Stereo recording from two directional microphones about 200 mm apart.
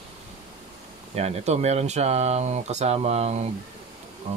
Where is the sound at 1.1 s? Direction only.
30° right (ahead or behind).